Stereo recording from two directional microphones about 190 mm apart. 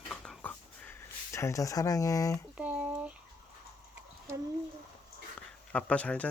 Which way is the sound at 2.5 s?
5° right (ahead or behind).